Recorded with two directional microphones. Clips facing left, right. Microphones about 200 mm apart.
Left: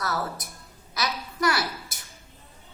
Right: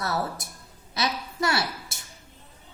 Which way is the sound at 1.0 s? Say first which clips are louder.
Right 1 dB; 25° right (ahead or behind).